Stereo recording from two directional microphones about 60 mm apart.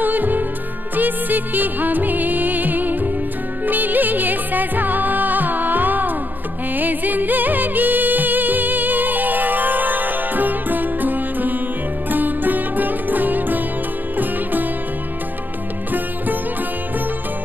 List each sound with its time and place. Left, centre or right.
0.0 s music: right